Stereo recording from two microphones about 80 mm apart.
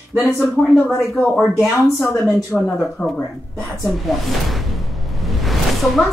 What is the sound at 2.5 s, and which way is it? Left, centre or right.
Speech, centre.